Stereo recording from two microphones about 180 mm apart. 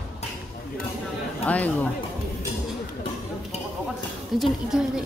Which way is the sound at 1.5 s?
10° left (ahead or behind).